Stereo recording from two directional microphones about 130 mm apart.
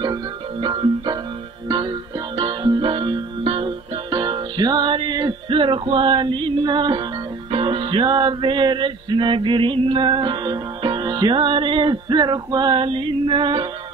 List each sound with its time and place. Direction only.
0.0 s music: 35° right (ahead or behind)